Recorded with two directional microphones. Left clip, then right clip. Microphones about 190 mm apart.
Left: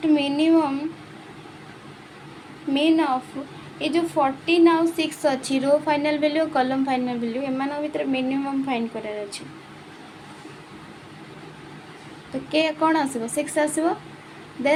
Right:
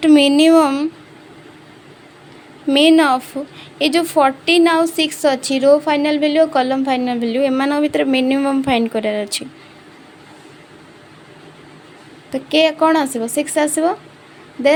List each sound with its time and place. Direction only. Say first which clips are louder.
0.0 s a woman's voice: right 10 dB; 45° right (ahead or behind)
2.7 s a woman's voice: right 9 dB; 45° right (ahead or behind)
12.3 s speech: right 8 dB; 35° right (ahead or behind)